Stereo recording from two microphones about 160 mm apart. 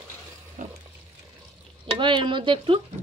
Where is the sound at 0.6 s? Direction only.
50° right (ahead or behind).